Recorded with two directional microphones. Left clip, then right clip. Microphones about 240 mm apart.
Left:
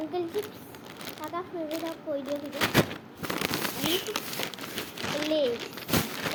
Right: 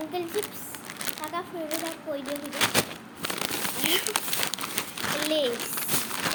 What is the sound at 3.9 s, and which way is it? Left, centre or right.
Crumpling, centre.